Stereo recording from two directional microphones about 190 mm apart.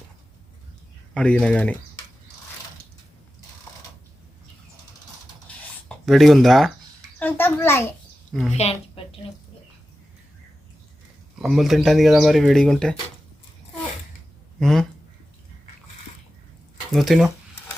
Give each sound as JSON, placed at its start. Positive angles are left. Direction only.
{"t": 1.1, "sound": "a child's voice", "side_deg": 5}
{"t": 6.1, "sound": "a child's voice", "side_deg": 0}
{"t": 8.3, "sound": "a woman's voice", "side_deg": 0}
{"t": 11.3, "sound": "speech", "side_deg": 0}
{"t": 14.6, "sound": "speech", "side_deg": 0}
{"t": 16.9, "sound": "speech", "side_deg": 0}